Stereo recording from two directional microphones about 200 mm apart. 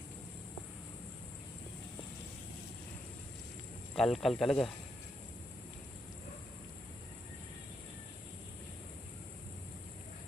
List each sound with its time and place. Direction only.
3.9 s speech: centre (ahead or behind)